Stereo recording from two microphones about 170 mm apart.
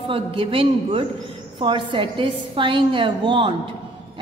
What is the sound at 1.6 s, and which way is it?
A woman's voice, 30° right (ahead or behind).